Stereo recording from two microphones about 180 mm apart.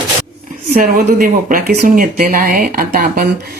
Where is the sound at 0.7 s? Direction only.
50° right (ahead or behind).